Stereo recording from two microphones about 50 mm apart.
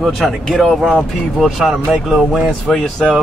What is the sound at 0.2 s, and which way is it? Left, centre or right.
Speech, centre.